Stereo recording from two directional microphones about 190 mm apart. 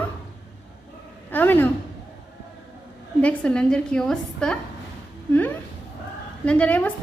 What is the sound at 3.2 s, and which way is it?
A woman's voice, 5° left (ahead or behind).